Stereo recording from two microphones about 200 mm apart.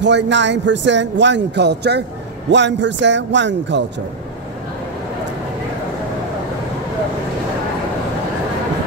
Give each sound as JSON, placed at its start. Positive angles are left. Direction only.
{"t": 0.0, "sound": "a man's voice", "side_deg": -60}